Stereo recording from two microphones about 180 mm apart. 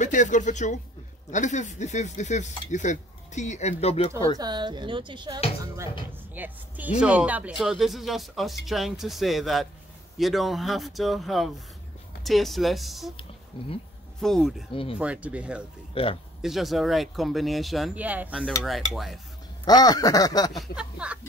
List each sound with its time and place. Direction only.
0.0 s speech: 45° left (ahead or behind)
4.4 s speech: 25° right (ahead or behind)
6.3 s speech: 10° right (ahead or behind)
13.5 s speech: 25° left (ahead or behind)
14.2 s speech: centre (ahead or behind)
14.7 s speech: 30° left (ahead or behind)
15.0 s speech: 5° right (ahead or behind)
15.9 s speech: 30° left (ahead or behind)
16.4 s speech: centre (ahead or behind)
19.6 s speech: 20° left (ahead or behind)
20.7 s speech: 5° right (ahead or behind)